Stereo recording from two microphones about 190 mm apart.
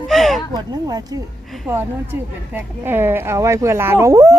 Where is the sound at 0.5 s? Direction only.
20° right (ahead or behind).